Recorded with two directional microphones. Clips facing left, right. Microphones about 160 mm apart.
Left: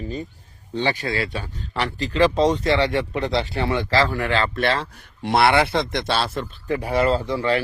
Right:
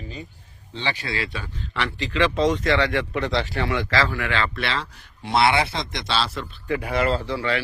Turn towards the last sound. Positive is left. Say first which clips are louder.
# left 3 dB
turn(degrees=40)  # may be behind; listen again after turning